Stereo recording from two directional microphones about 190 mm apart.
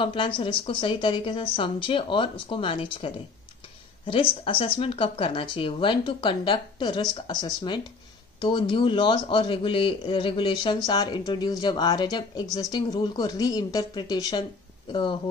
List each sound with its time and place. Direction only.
0.0 s speech: 25° left (ahead or behind)